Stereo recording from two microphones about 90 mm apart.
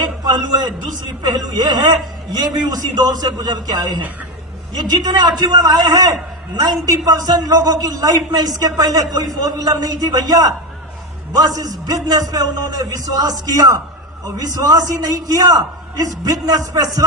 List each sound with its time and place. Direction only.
0.3 s a man's voice: 55° right (ahead or behind)